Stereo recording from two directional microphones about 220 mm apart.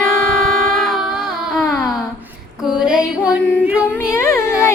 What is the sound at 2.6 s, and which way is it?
Female singing, 5° right (ahead or behind).